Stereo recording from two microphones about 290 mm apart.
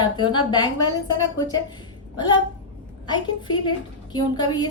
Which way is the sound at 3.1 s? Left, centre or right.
Centre.